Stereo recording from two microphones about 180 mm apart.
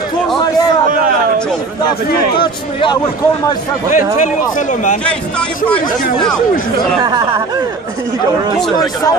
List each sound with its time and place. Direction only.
2.4 s a man's voice: 25° left (ahead or behind)
3.9 s speech: 45° left (ahead or behind)
7.0 s speech: 25° right (ahead or behind)